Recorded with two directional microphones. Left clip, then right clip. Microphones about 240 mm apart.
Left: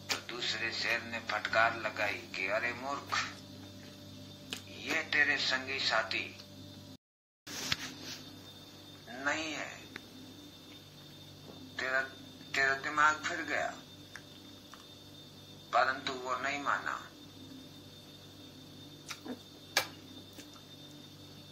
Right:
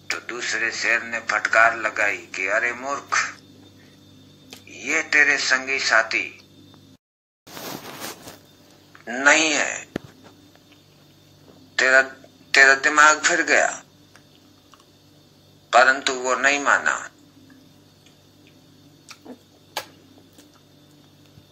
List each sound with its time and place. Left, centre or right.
0.3 s a man's voice: right
4.7 s a man's voice: right
9.0 s a man's voice: right
11.7 s speech: right
15.7 s a man's voice: right